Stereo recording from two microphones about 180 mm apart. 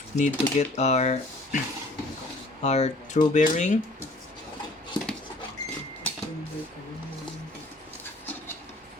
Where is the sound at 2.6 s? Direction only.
40° left (ahead or behind).